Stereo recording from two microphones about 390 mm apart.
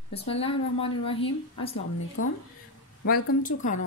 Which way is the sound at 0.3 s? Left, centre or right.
Centre.